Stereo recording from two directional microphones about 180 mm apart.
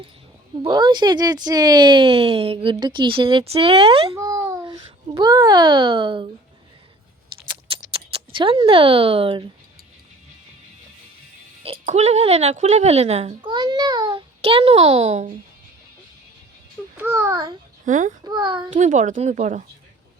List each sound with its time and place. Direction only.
0.6 s speech: 25° right (ahead or behind)
4.1 s a child's voice: 15° right (ahead or behind)
7.4 s a sound: 25° right (ahead or behind)
11.6 s speech: 35° right (ahead or behind)
17.0 s a child's voice: 15° right (ahead or behind)
17.8 s speech: 45° right (ahead or behind)
18.2 s speech: 25° right (ahead or behind)
18.7 s speech: 45° right (ahead or behind)